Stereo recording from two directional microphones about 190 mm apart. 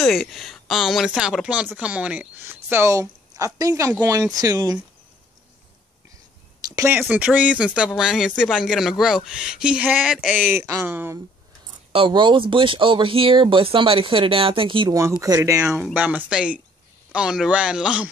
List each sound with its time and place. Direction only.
0.0 s speech: centre (ahead or behind); by 4.7 s 20° right (ahead or behind)
6.7 s a sound: 15° right (ahead or behind)
7.0 s speech: 5° right (ahead or behind)
11.9 s speech: 25° right (ahead or behind); by 18.1 s 5° right (ahead or behind)